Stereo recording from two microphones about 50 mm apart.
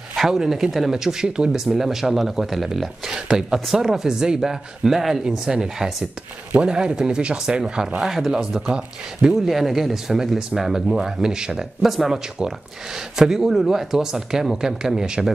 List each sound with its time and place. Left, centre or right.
0.3 s speech: centre
3.1 s speech: centre
6.5 s speech: centre
9.5 s speech: centre